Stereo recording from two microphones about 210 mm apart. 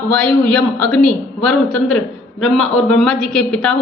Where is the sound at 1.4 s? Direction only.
90° left.